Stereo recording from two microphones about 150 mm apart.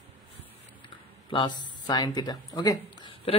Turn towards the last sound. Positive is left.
turn(degrees=25)  # may be behind; listen again after turning